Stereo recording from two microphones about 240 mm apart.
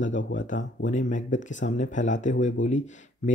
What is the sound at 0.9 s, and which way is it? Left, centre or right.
Speech, left.